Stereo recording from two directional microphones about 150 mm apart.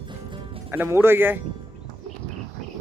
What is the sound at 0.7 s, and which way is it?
Speech, 15° right (ahead or behind).